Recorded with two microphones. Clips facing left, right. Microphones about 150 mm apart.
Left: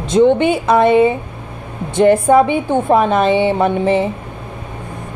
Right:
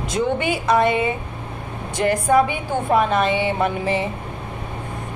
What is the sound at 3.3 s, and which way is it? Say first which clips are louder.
Speech: left 7 dB; 30° left (ahead or behind).